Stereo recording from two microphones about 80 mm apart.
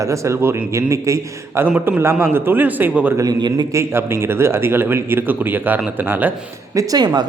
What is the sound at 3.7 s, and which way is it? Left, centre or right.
A man's voice, right.